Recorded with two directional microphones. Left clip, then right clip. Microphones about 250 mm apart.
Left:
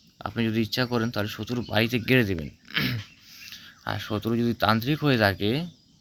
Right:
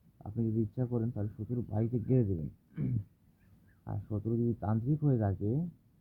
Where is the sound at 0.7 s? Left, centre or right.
Left.